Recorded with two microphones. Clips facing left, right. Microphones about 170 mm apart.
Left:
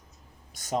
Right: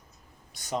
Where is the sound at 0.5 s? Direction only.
45° left (ahead or behind).